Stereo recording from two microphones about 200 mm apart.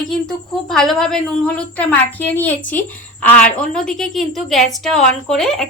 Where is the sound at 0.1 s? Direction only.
Centre (ahead or behind).